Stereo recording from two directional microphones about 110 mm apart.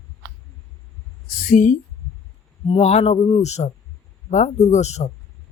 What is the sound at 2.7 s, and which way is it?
Speech, 70° left (ahead or behind).